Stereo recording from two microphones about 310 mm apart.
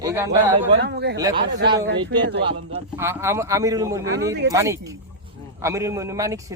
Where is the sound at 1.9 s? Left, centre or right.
Right.